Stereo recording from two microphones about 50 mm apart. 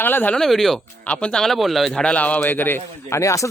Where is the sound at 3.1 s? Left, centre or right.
Left.